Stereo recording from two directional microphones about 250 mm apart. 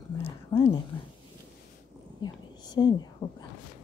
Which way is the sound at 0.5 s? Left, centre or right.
Left.